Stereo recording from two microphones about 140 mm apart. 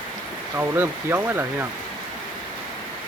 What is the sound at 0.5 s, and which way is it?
Speech, 15° right (ahead or behind).